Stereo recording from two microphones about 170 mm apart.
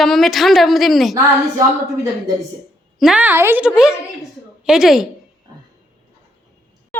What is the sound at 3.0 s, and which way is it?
A woman's voice, 5° right (ahead or behind).